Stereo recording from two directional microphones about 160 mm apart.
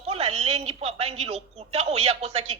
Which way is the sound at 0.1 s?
40° right (ahead or behind).